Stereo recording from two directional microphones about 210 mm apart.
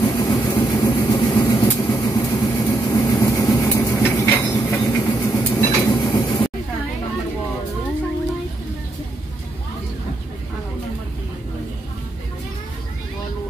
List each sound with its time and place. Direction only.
0.0 s vehicle: 15° left (ahead or behind)